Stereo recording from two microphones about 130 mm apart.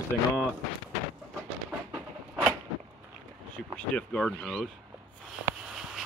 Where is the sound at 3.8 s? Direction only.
10° left (ahead or behind).